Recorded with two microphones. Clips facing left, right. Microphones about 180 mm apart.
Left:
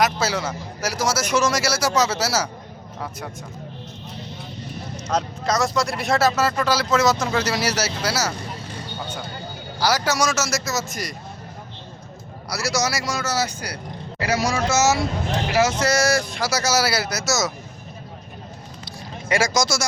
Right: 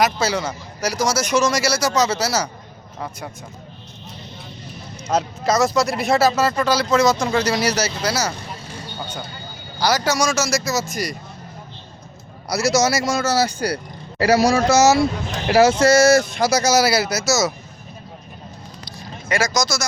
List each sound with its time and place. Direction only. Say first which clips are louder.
0.0 s a man's voice: right 2 dB; 5° left (ahead or behind)
5.1 s a man's voice: right 4 dB; 5° right (ahead or behind)
9.8 s a man's voice: right 2 dB; 5° left (ahead or behind)
12.5 s speech: right 6 dB; 20° right (ahead or behind); by 17.5 s centre (ahead or behind)